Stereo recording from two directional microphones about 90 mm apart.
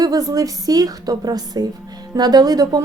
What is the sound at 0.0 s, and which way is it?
A woman's voice, 45° right (ahead or behind).